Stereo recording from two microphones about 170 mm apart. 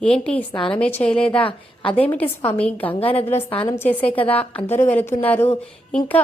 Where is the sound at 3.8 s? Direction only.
10° left (ahead or behind).